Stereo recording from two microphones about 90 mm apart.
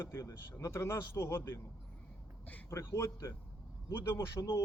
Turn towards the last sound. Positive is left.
turn(degrees=35)  # may be behind; listen again after turning